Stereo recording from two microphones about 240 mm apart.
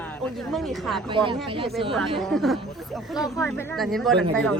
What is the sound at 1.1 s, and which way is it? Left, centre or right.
Speech, right.